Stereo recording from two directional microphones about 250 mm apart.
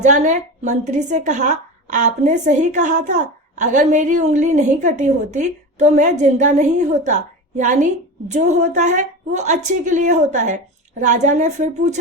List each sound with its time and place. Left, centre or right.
0.0 s a woman's voice: right